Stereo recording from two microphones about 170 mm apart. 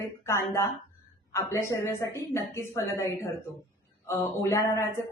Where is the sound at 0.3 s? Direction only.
15° left (ahead or behind).